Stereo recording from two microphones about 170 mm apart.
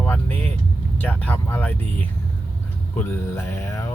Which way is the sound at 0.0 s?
10° left (ahead or behind).